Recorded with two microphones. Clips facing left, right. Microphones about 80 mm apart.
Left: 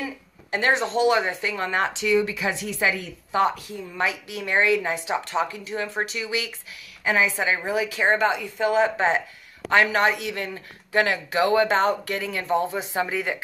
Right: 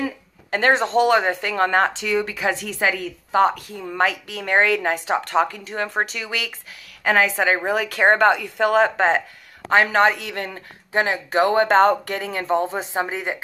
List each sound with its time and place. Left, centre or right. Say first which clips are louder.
0.0 s speech: right 6 dB; right
3.7 s speech: right 4 dB; right
4.0 s speech: right 5 dB; right
10.9 s speech: right 1 dB; right
11.3 s speech: right 4 dB; right